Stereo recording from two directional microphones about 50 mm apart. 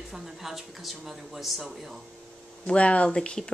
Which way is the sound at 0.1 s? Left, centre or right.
Centre.